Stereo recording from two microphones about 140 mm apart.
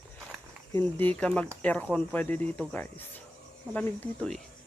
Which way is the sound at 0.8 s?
15° left (ahead or behind).